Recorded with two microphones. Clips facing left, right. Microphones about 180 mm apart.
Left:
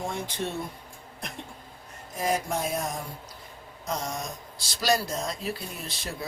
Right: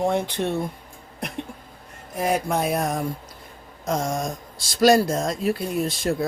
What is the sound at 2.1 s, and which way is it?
Speech, 60° right (ahead or behind).